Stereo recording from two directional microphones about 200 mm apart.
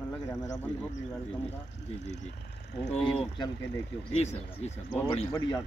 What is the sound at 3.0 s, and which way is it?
Speech, 5° left (ahead or behind).